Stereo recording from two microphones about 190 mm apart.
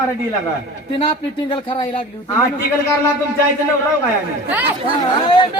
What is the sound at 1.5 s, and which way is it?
Speech, 25° left (ahead or behind).